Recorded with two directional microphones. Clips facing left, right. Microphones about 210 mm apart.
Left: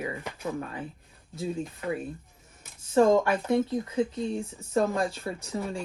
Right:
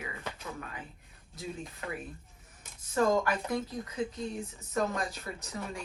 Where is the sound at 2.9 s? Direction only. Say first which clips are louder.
Left 6 dB; 25° left (ahead or behind).